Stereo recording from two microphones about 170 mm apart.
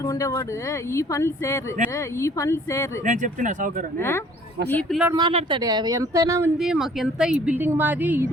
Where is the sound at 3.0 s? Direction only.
45° right (ahead or behind).